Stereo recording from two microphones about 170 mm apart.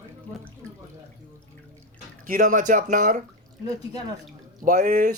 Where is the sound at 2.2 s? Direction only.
50° right (ahead or behind).